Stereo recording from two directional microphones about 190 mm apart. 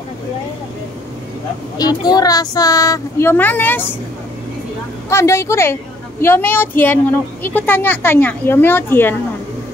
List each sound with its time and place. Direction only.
1.8 s speech: 20° left (ahead or behind)
5.1 s a woman's voice: 15° left (ahead or behind)